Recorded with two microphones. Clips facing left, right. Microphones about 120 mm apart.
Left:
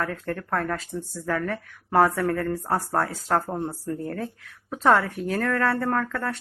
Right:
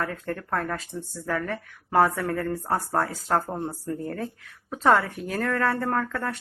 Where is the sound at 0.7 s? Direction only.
5° right (ahead or behind).